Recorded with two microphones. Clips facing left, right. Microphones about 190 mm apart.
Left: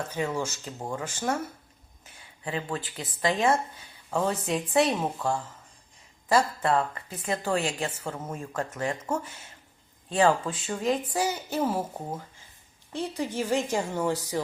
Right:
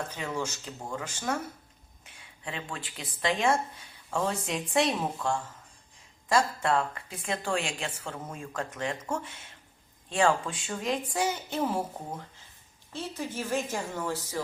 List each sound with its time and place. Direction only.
0.1 s a woman's voice: 10° left (ahead or behind)
2.4 s a woman's voice: 5° left (ahead or behind)
12.9 s a woman's voice: 15° left (ahead or behind)